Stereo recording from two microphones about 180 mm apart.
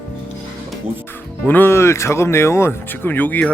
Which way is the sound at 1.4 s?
10° left (ahead or behind).